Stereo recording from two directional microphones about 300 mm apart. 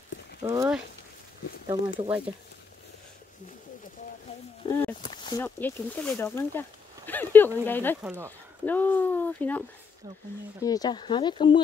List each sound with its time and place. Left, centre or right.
0.4 s speech: centre
4.7 s speech: centre
8.0 s speech: centre
8.6 s speech: centre